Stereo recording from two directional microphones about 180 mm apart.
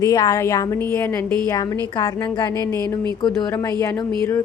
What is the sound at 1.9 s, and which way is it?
Speech, 25° left (ahead or behind).